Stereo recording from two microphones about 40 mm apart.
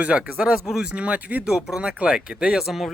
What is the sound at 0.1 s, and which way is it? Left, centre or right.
Speech, right.